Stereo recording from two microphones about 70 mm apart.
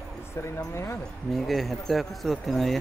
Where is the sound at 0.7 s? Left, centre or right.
Left.